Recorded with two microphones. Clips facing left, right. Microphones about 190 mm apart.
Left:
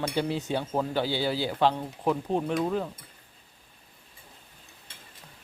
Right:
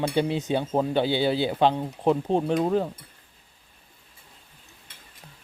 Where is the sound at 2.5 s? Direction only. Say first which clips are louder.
Right 4 dB; 35° right (ahead or behind).